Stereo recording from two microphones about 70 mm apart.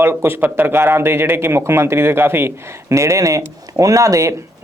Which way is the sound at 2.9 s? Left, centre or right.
Right.